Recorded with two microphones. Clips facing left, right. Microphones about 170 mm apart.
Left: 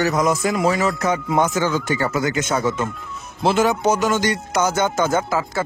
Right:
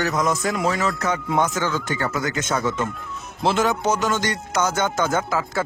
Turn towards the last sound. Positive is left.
turn(degrees=5)  # may be behind; listen again after turning